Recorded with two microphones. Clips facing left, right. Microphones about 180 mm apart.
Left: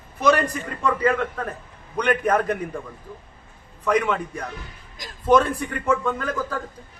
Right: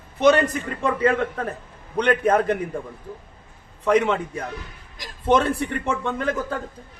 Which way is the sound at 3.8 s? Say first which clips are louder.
Right 2 dB; 25° right (ahead or behind).